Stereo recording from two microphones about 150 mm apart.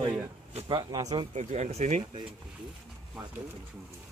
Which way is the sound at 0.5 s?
30° right (ahead or behind).